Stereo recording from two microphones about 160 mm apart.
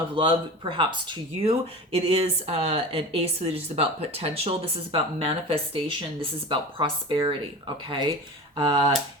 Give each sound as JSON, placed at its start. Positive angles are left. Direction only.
{"t": 0.1, "sound": "speech", "side_deg": -35}